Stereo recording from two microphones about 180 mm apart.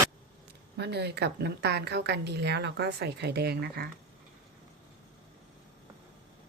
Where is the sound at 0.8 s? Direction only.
65° right (ahead or behind).